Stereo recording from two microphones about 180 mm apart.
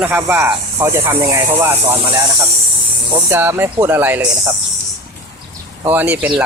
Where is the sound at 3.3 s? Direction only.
10° right (ahead or behind).